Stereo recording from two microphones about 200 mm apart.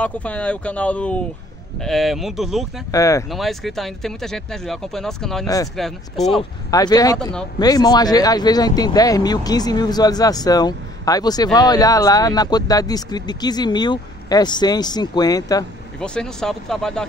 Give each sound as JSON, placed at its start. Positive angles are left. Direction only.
{"t": 0.0, "sound": "speech", "side_deg": 5}
{"t": 2.9, "sound": "speech", "side_deg": 15}
{"t": 3.3, "sound": "speech", "side_deg": 0}
{"t": 6.7, "sound": "speech", "side_deg": 20}
{"t": 16.0, "sound": "speech", "side_deg": 5}